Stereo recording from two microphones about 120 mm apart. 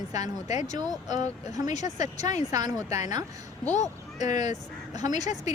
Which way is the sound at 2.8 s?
65° left (ahead or behind).